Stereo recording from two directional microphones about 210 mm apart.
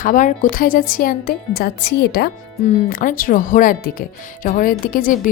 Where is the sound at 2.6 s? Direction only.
40° left (ahead or behind).